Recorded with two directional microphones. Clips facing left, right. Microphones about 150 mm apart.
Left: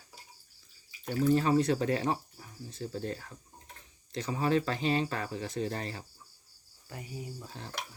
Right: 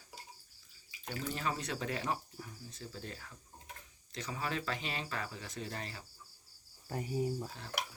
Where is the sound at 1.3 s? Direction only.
35° left (ahead or behind).